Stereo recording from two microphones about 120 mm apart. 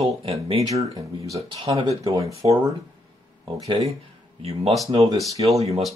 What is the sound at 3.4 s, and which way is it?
Speech, 40° right (ahead or behind).